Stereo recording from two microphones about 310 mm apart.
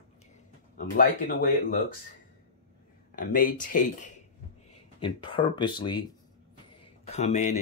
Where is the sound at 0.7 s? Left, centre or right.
Left.